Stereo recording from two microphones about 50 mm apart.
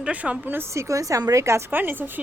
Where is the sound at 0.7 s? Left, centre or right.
Right.